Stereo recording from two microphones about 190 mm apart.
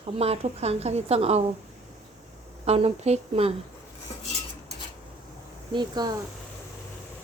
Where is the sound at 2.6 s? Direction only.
35° right (ahead or behind).